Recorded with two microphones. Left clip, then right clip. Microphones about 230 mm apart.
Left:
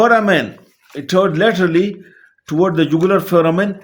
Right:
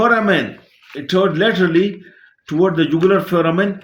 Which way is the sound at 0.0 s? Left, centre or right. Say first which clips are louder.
Left 2 dB; left.